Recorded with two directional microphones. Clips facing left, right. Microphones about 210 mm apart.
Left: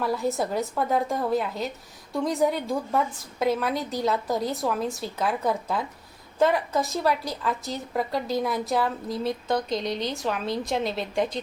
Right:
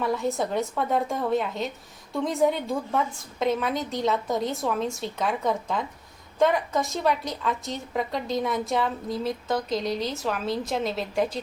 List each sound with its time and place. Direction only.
0.0 s a woman's voice: centre (ahead or behind)